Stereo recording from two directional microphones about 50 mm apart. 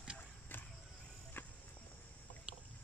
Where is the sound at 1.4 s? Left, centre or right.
Left.